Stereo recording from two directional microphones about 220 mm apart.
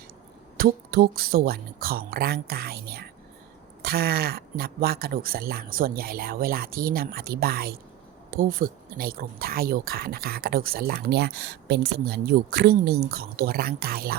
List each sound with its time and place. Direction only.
0.5 s speech: 45° right (ahead or behind)